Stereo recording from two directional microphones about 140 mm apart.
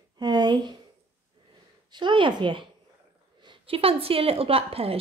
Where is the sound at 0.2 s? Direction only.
30° right (ahead or behind).